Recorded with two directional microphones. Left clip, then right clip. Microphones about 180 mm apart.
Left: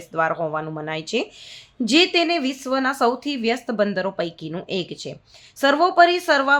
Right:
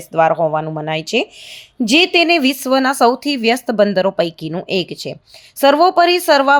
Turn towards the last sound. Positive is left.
turn(degrees=-35)  # may be behind; listen again after turning